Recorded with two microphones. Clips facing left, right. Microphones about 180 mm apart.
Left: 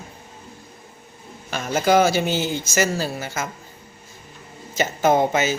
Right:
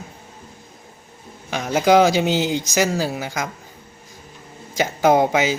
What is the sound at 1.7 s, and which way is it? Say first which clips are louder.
Speech: right 3 dB; 15° right (ahead or behind).